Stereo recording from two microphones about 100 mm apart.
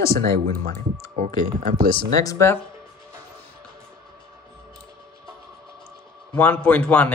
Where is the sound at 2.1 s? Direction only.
35° left (ahead or behind).